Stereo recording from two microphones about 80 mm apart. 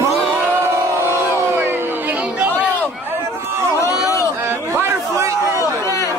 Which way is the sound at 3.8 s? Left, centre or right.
Left.